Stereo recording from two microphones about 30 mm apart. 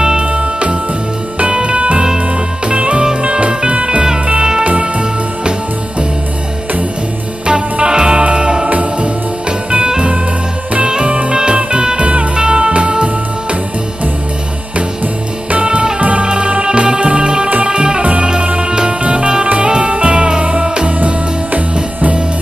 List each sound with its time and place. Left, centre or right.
0.2 s music: right
2.0 s music: right
2.7 s music: right
7.4 s music: right
9.8 s music: right
11.5 s music: right
12.0 s music: right
12.4 s music: right
15.6 s music: right
16.0 s music: right
20.6 s music: right
21.0 s music: right